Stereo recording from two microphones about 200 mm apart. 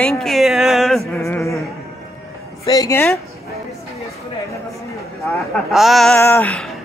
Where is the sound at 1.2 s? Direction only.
15° left (ahead or behind).